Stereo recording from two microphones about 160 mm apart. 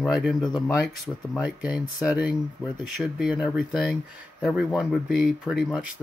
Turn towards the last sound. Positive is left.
turn(degrees=-5)  # may be behind; listen again after turning